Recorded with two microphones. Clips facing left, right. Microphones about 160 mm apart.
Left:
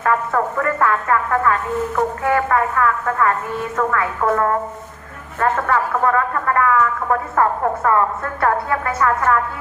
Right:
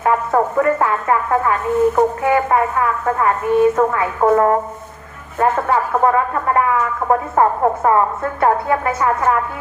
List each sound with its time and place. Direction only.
0.0 s speech: 25° right (ahead or behind)